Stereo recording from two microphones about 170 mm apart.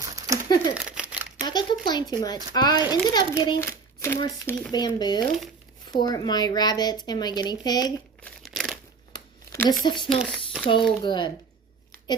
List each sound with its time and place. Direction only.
0.0 s crumpling: 20° right (ahead or behind)
0.4 s crumpling: 20° left (ahead or behind)
0.7 s crumpling: 5° right (ahead or behind)
1.5 s speech: 25° left (ahead or behind)
3.6 s hands: 15° left (ahead or behind)
4.4 s speech: 10° left (ahead or behind)
4.7 s speech: 25° left (ahead or behind)
8.2 s crumpling: centre (ahead or behind)
9.1 s a sound: 20° left (ahead or behind)
9.8 s speech: 25° left (ahead or behind)
10.2 s a sound: centre (ahead or behind)
11.0 s speech: 25° left (ahead or behind)